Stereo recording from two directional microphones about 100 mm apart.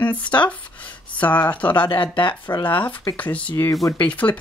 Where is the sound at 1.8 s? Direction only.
55° left (ahead or behind).